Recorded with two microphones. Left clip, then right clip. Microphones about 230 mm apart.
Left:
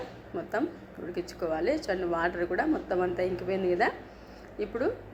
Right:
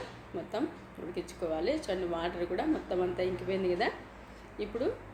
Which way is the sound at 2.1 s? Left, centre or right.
Centre.